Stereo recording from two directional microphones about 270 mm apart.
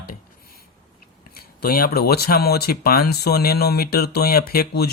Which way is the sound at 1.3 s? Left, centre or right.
Left.